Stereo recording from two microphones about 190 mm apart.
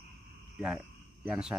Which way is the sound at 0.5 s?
Centre (ahead or behind).